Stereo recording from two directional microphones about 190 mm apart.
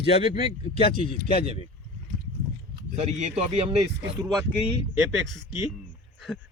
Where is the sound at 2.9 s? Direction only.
30° right (ahead or behind).